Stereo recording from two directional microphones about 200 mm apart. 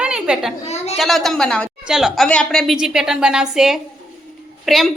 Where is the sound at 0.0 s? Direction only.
5° right (ahead or behind).